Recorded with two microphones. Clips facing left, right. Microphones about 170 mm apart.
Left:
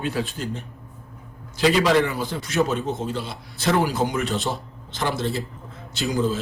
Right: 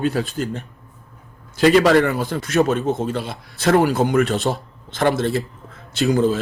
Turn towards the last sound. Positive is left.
turn(degrees=-60)  # may be behind; listen again after turning